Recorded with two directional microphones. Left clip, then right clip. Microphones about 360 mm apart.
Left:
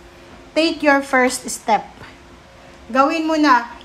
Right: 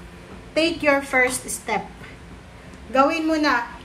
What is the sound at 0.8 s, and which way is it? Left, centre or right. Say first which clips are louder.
Speech: left 4 dB; centre.